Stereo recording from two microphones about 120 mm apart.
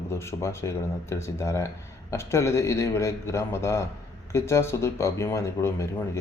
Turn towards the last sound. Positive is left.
turn(degrees=25)  # may be behind; listen again after turning